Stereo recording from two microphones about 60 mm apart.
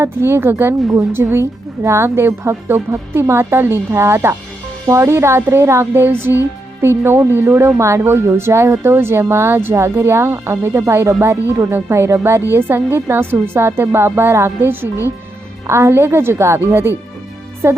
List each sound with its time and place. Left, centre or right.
0.0 s speech: right
8.1 s speech: right
15.6 s speech: right